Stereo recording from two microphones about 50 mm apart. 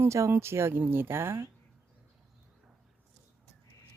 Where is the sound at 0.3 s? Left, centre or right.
Right.